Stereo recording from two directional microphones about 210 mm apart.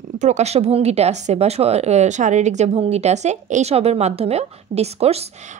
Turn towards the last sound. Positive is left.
turn(degrees=-30)  # may be behind; listen again after turning